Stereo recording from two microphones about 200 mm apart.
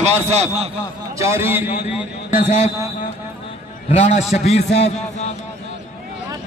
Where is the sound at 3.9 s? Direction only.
30° left (ahead or behind).